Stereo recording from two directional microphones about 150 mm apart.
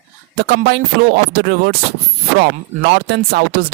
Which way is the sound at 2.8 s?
90° right.